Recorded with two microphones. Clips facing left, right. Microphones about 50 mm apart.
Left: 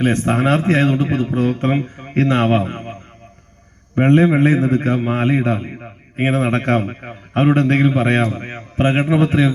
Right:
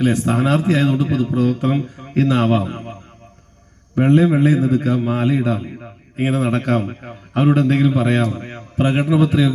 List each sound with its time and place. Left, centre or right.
0.0 s a man's voice: left